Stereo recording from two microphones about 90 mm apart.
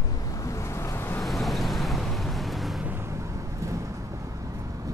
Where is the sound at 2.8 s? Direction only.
20° right (ahead or behind).